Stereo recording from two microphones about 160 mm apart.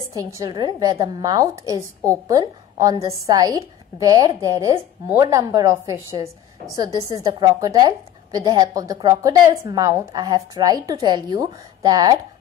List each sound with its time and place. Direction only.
0.1 s a woman's voice: 20° right (ahead or behind)